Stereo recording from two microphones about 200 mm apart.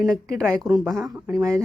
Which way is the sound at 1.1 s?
15° right (ahead or behind).